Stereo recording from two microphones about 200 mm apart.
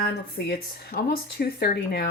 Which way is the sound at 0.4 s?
55° left (ahead or behind).